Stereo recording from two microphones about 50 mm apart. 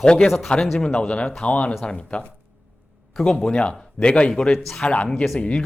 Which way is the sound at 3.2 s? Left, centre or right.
Centre.